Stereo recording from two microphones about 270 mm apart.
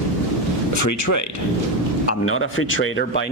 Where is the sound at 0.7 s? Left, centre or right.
Left.